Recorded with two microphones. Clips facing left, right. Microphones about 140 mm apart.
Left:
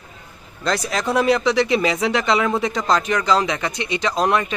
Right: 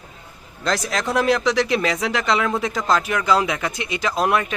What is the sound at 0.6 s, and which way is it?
Speech, centre (ahead or behind).